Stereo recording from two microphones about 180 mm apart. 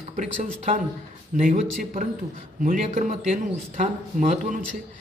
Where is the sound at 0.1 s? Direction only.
40° right (ahead or behind).